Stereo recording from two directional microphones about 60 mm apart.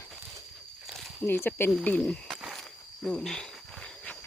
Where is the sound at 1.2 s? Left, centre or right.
Left.